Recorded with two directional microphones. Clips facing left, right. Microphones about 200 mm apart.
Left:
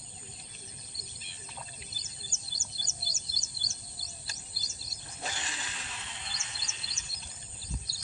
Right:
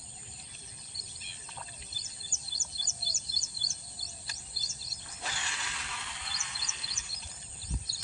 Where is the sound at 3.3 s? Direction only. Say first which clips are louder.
Left 2 dB; 50° right (ahead or behind).